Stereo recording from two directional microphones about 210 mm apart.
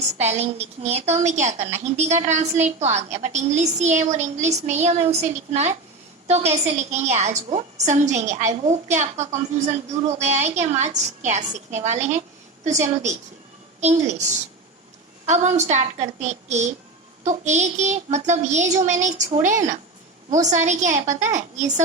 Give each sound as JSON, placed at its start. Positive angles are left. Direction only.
{"t": 0.2, "sound": "a woman's voice", "side_deg": -30}
{"t": 15.3, "sound": "a woman's voice", "side_deg": -30}